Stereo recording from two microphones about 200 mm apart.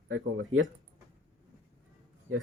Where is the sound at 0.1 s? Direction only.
75° right (ahead or behind).